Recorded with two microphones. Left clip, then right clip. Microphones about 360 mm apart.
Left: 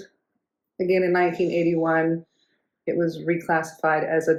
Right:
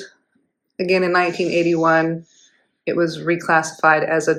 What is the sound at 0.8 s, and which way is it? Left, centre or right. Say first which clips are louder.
Speech: right 4 dB; right.